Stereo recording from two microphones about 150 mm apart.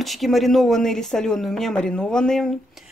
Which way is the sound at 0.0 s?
Centre (ahead or behind).